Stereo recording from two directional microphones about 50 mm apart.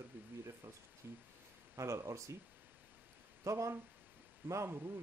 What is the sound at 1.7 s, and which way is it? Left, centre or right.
Speech, right.